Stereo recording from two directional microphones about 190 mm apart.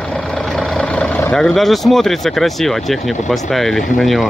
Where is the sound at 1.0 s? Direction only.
10° left (ahead or behind).